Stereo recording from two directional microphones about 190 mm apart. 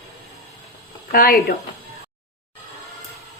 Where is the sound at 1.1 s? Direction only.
50° left (ahead or behind).